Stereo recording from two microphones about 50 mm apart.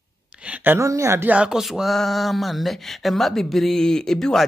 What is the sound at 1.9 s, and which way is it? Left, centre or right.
Speech, centre.